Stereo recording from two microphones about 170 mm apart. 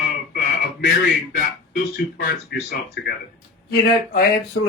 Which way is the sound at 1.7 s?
60° left (ahead or behind).